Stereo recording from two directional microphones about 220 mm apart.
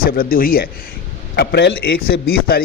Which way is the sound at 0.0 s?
40° left (ahead or behind).